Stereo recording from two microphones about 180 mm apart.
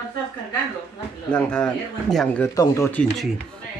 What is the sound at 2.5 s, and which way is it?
Speech, 15° left (ahead or behind).